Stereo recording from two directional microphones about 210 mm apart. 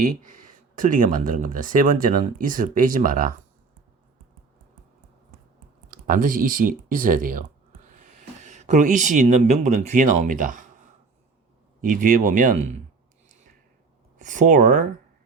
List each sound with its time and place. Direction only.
0.0 s speech: 40° right (ahead or behind)
5.9 s speech: 40° right (ahead or behind)
11.8 s speech: 40° right (ahead or behind)
13.2 s a sound: 35° right (ahead or behind)
14.2 s speech: 35° right (ahead or behind)